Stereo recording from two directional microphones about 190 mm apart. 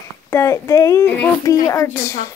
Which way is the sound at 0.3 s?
15° left (ahead or behind).